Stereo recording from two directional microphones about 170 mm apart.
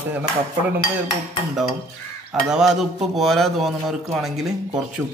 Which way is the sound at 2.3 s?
5° right (ahead or behind).